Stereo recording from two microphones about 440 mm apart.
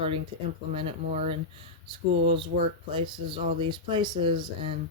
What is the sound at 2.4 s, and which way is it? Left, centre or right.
Speech, centre.